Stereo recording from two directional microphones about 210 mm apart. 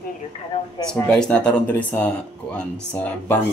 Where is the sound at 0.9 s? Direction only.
5° left (ahead or behind).